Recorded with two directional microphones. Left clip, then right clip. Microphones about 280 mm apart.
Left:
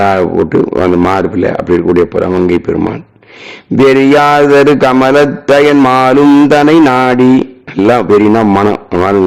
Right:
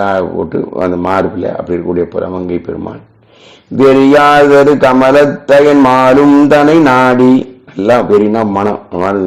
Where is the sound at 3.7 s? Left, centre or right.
Centre.